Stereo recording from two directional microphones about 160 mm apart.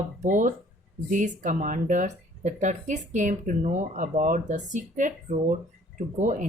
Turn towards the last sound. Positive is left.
turn(degrees=-50)  # may be behind; listen again after turning